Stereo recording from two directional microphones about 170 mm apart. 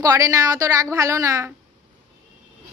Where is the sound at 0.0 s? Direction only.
20° right (ahead or behind).